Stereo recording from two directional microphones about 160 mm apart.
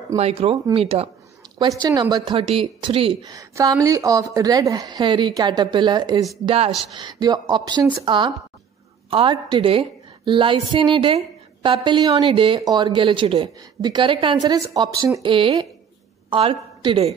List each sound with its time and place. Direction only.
0.2 s a woman's voice: 35° right (ahead or behind)
1.6 s a woman's voice: 25° right (ahead or behind)
3.3 s speech: 20° right (ahead or behind)
6.4 s a woman's voice: 35° right (ahead or behind)
7.0 s a woman's voice: 25° right (ahead or behind)